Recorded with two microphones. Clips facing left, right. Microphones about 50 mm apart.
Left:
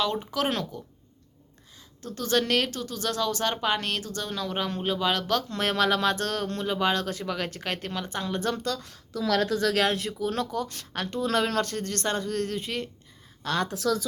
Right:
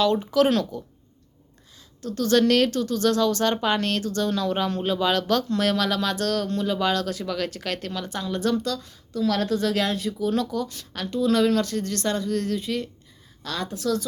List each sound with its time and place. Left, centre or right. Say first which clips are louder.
0.0 s speech: right 7 dB; centre
2.0 s speech: right 6 dB; left; by 5.5 s centre
5.5 s speech: right 2 dB; left
8.8 s a woman's voice: right 5 dB; left